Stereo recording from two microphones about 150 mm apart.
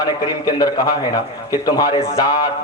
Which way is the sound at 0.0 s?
25° left (ahead or behind).